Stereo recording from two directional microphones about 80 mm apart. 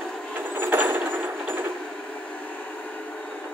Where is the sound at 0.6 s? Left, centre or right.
Right.